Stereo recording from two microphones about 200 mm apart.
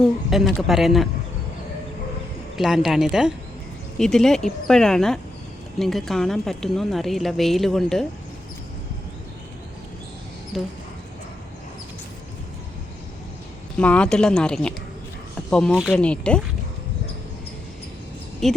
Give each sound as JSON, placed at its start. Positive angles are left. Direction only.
{"t": 0.0, "sound": "a woman's voice", "side_deg": 0}
{"t": 2.6, "sound": "a woman's voice", "side_deg": 0}
{"t": 10.5, "sound": "a woman's voice", "side_deg": 0}
{"t": 13.7, "sound": "a woman's voice", "side_deg": 5}
{"t": 18.4, "sound": "speech", "side_deg": 0}